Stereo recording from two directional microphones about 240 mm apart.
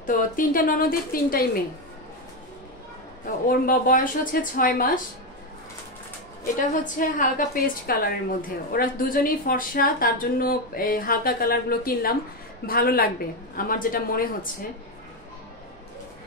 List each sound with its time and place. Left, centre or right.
0.0 s a woman's voice: left
3.4 s a woman's voice: left
6.4 s a woman's voice: left